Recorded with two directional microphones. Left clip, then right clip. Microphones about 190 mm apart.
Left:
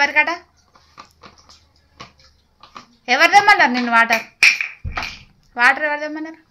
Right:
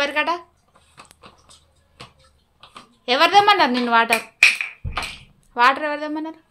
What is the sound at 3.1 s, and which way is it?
A woman's voice, 25° right (ahead or behind).